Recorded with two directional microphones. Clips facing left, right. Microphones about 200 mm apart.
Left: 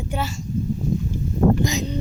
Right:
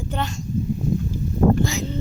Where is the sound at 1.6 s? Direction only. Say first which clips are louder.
Left 1 dB; 15° left (ahead or behind).